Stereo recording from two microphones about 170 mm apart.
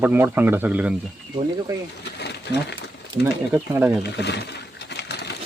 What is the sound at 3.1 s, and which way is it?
Speech, 30° right (ahead or behind).